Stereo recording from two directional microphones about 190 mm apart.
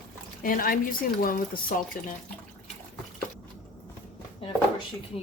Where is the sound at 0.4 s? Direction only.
45° left (ahead or behind).